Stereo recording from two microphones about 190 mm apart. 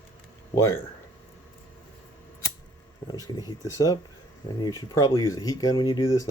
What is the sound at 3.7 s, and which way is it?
Speech, 20° left (ahead or behind).